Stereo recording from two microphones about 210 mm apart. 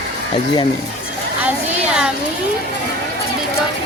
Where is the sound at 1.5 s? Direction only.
5° right (ahead or behind).